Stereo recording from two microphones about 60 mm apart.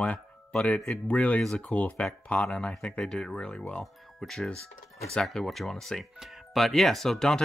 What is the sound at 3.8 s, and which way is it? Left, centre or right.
Speech, centre.